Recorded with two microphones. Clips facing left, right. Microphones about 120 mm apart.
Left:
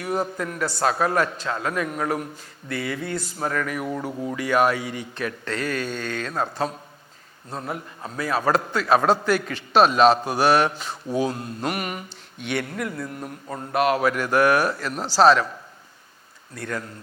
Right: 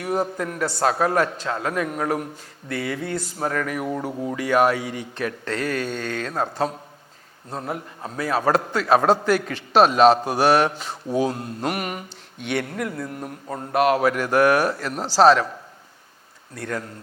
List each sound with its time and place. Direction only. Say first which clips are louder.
0.0 s a man's voice: right 2 dB; 40° right (ahead or behind)
4.4 s a man's voice: right 2 dB; 50° right (ahead or behind)
13.7 s speech: right 2 dB; 50° right (ahead or behind)
15.1 s a man's voice: right 1 dB; 55° right (ahead or behind)
16.6 s a man's voice: right 1 dB; 40° right (ahead or behind)